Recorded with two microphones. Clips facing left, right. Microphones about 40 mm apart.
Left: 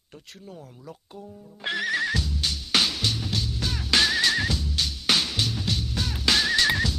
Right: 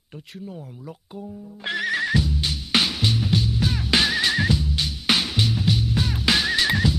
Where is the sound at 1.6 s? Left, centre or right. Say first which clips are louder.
Right 2 dB; centre.